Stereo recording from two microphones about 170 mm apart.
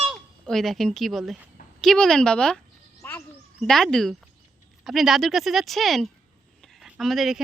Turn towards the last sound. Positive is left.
turn(degrees=0)  # may be behind; listen again after turning